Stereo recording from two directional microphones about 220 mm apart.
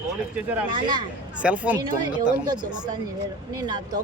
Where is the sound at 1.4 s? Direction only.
5° right (ahead or behind).